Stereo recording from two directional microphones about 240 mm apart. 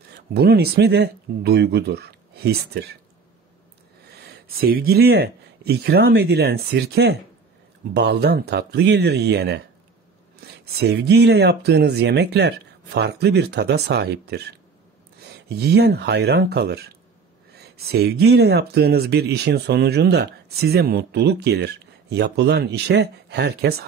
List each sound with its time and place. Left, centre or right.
0.1 s speech: right
4.1 s speech: right
15.4 s speech: right